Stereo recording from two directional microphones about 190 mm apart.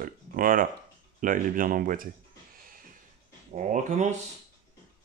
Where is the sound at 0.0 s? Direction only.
45° right (ahead or behind).